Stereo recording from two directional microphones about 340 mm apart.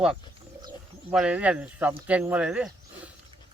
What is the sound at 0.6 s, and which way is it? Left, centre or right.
Speech, centre.